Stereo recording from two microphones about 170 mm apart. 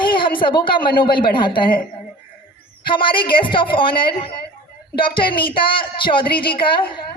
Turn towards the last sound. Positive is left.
turn(degrees=30)  # may be behind; listen again after turning